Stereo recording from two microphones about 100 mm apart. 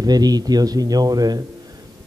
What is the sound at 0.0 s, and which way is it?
A man's voice, 40° right (ahead or behind).